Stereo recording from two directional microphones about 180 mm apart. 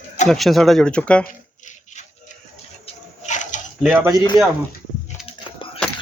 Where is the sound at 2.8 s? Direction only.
40° left (ahead or behind).